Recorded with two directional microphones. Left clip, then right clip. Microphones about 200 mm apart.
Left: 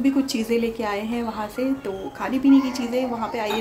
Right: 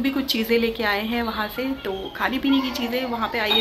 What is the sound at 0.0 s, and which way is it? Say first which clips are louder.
Speech: left 1 dB; 10° left (ahead or behind).